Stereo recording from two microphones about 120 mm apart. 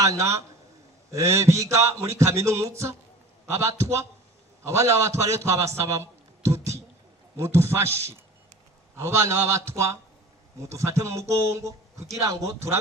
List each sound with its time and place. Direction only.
0.0 s a man's voice: 25° right (ahead or behind)
9.0 s speech: 25° right (ahead or behind)